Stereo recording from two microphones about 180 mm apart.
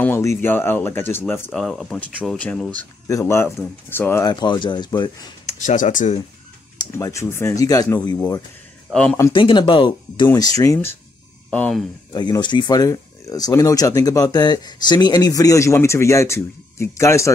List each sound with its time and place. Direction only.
0.0 s speech: 15° left (ahead or behind)
1.5 s speech: centre (ahead or behind); by 5.3 s 25° left (ahead or behind)
5.5 s speech: 40° left (ahead or behind)
6.8 s speech: 20° left (ahead or behind)
8.9 s speech: 5° left (ahead or behind)
9.3 s speech: 25° left (ahead or behind); by 11.8 s 5° left (ahead or behind)
12.1 s speech: 25° left (ahead or behind)